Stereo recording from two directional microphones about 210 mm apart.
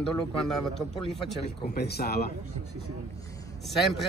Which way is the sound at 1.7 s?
50° left (ahead or behind).